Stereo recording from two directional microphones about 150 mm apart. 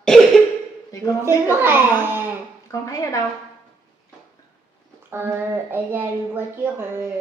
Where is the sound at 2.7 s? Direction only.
20° left (ahead or behind).